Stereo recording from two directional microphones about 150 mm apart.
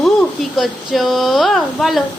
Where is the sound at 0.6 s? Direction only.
Centre (ahead or behind).